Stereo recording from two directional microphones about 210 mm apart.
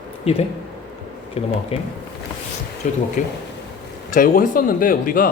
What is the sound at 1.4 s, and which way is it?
A woman's voice, 30° left (ahead or behind).